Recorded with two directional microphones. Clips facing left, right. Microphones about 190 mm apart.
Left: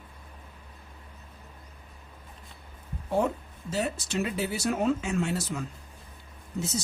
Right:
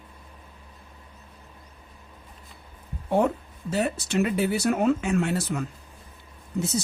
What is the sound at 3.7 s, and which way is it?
Speech, 60° right (ahead or behind).